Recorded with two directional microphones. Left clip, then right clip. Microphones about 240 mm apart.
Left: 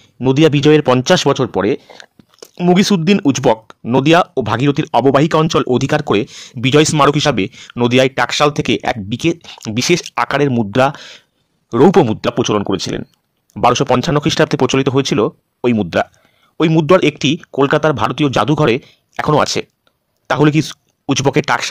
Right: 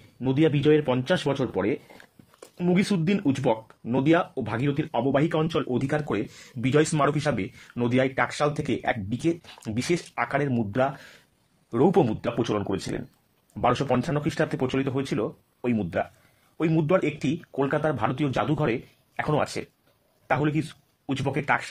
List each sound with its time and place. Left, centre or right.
0.2 s speech: left